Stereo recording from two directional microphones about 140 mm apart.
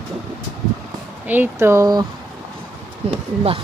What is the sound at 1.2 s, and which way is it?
Speech, 15° right (ahead or behind).